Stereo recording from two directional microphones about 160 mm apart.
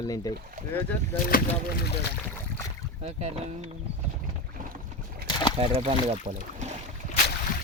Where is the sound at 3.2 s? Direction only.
45° right (ahead or behind).